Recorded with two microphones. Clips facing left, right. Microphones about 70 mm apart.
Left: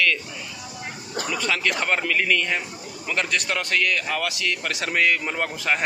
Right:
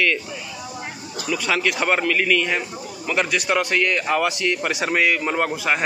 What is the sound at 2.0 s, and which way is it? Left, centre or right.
A man's voice, centre.